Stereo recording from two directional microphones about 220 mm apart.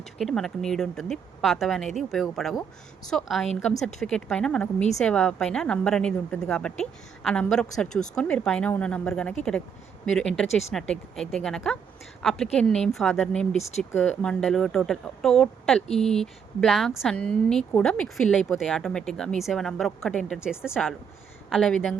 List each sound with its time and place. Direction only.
0.2 s speech: centre (ahead or behind)